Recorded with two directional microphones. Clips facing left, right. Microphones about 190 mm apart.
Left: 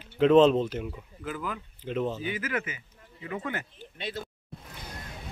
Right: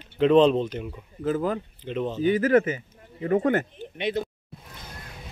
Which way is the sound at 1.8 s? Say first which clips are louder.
Left 1 dB; 5° left (ahead or behind).